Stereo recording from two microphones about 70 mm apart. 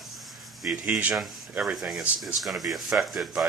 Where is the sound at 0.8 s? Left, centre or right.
Centre.